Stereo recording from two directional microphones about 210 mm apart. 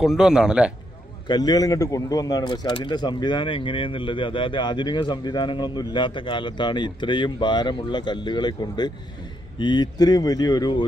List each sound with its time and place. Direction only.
0.0 s a man's voice: centre (ahead or behind)
1.2 s speech: 20° left (ahead or behind)